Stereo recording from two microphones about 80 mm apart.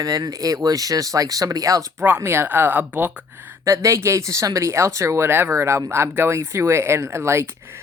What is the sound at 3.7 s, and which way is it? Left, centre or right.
Speech, right.